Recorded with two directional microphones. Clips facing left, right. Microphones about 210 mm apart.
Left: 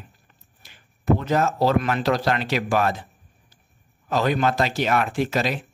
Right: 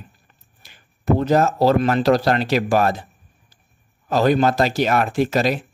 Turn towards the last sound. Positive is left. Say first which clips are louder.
# right 5 dB
turn(degrees=-40)  # may be behind; listen again after turning